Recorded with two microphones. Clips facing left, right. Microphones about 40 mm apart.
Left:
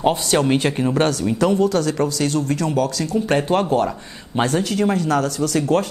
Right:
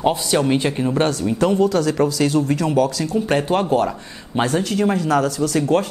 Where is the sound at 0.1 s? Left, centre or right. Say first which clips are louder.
Even; left.